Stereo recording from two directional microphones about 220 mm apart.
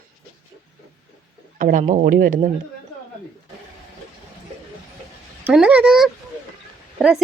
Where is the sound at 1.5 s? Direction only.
35° right (ahead or behind).